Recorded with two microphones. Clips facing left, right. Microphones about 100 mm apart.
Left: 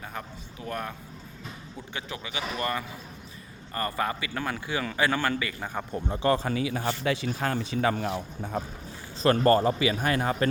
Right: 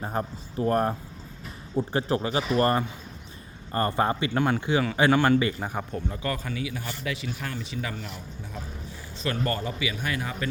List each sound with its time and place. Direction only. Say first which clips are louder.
0.0 s speech: right 8 dB; 35° right (ahead or behind)
3.7 s a man's voice: right 5 dB; 25° right (ahead or behind)
5.9 s speech: left 5 dB; 25° left (ahead or behind)
7.3 s speech: left 5 dB; 45° left (ahead or behind)